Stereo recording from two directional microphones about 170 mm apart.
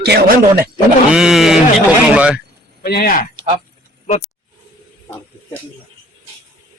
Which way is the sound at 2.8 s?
60° left (ahead or behind).